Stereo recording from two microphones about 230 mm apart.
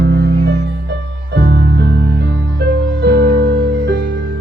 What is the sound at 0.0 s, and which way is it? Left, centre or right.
Music, right.